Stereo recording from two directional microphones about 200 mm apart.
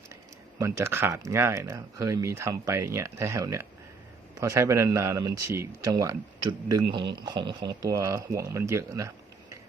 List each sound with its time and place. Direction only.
0.6 s speech: 15° right (ahead or behind)